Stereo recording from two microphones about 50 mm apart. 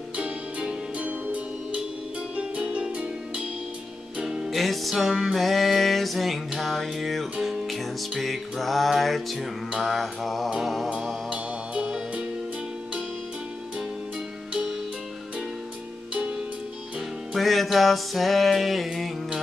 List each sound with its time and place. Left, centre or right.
0.2 s music: right
4.5 s music: centre
11.2 s music: right
17.3 s music: centre